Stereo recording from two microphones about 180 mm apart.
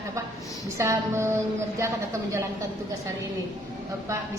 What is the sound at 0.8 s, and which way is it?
Speech, 15° right (ahead or behind).